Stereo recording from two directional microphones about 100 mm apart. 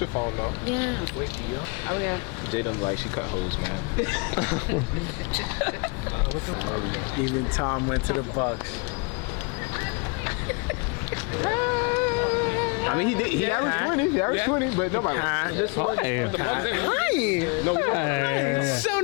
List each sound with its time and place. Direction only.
1.9 s speech: 30° left (ahead or behind)
7.5 s speech: 35° left (ahead or behind)
10.2 s speech: 25° left (ahead or behind)